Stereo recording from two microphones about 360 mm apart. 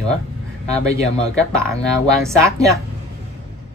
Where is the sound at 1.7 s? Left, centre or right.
Centre.